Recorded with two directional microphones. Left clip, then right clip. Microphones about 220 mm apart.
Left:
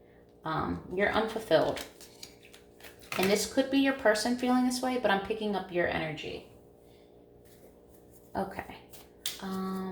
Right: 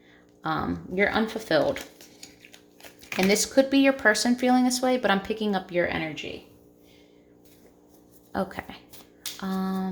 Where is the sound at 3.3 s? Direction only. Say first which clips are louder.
Right 8 dB; 45° right (ahead or behind).